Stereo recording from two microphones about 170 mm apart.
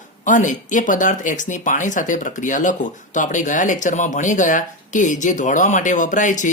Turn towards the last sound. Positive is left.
turn(degrees=50)  # may be behind; listen again after turning